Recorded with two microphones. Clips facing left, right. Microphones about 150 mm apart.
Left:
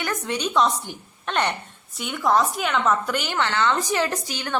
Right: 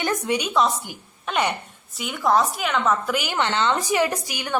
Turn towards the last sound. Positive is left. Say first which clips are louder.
# right 1 dB
turn(degrees=-10)  # may be behind; listen again after turning